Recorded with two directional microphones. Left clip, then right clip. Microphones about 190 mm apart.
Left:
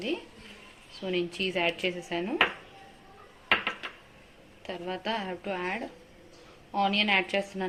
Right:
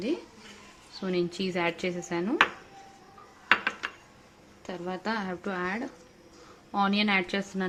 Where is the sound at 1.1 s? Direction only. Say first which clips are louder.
Even; 50° right (ahead or behind).